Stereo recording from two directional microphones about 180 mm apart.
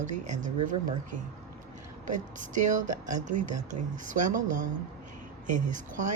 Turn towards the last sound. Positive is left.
turn(degrees=-45)  # may be behind; listen again after turning